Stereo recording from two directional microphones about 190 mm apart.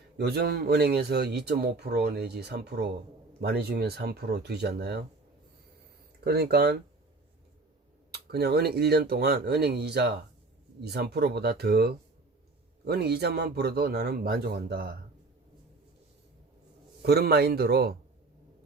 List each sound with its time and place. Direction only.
0.2 s speech: 55° right (ahead or behind)
6.2 s speech: 55° right (ahead or behind)
8.1 s speech: 60° right (ahead or behind)
17.0 s speech: 55° right (ahead or behind)